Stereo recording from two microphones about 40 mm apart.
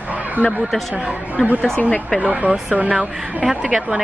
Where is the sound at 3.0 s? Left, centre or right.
Centre.